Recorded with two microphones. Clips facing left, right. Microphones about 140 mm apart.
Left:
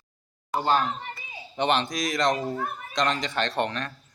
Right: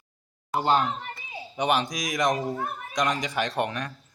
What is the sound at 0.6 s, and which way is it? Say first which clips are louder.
Speech: right 1 dB; 20° right (ahead or behind).